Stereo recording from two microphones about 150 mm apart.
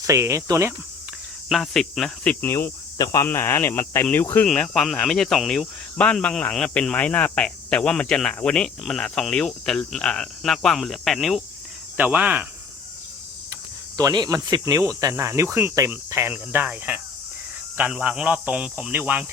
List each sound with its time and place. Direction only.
0.0 s speech: 20° right (ahead or behind)
1.5 s a man's voice: centre (ahead or behind)
13.9 s a man's voice: 25° right (ahead or behind); by 19.2 s 10° right (ahead or behind)